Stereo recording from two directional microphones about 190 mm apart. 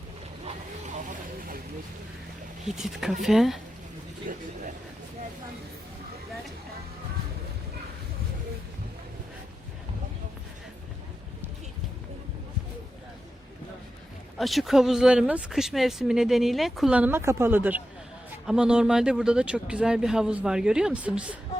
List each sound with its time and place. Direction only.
0.4 s vehicle: 40° right (ahead or behind)
2.6 s speech: centre (ahead or behind)
4.3 s a sound: 45° right (ahead or behind)
14.3 s speech: centre (ahead or behind)